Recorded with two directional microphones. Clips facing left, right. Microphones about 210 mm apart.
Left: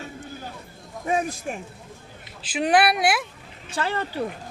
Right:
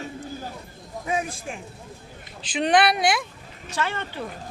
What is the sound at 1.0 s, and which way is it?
Speech, 40° left (ahead or behind).